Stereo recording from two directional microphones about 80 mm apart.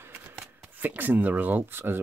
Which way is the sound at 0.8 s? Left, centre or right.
Right.